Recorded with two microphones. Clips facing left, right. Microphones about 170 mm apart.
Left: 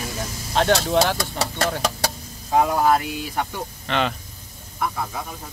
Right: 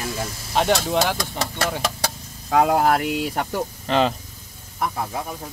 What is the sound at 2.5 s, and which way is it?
Speech, 80° right.